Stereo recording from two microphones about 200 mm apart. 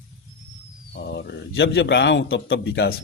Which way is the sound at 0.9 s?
55° left (ahead or behind).